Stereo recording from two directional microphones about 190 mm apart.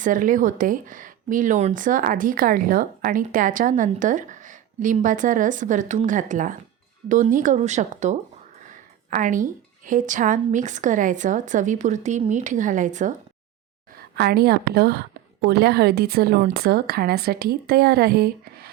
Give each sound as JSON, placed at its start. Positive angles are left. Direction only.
{"t": 0.0, "sound": "a woman's voice", "side_deg": -45}
{"t": 14.2, "sound": "a woman's voice", "side_deg": -55}